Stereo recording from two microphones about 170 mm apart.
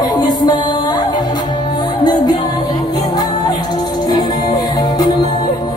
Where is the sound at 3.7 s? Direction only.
25° left (ahead or behind).